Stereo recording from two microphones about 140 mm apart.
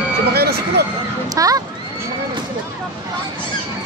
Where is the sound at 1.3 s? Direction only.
25° right (ahead or behind).